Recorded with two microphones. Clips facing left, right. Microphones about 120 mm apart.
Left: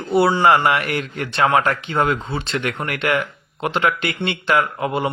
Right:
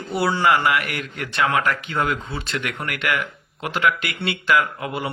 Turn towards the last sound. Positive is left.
turn(degrees=30)  # may be behind; listen again after turning